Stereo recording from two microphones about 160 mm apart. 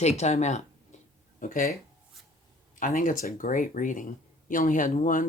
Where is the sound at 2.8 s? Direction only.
55° left (ahead or behind).